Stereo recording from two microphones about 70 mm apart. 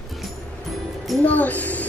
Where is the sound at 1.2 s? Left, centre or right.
Left.